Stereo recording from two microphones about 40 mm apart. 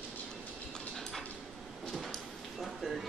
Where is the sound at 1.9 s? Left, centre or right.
Centre.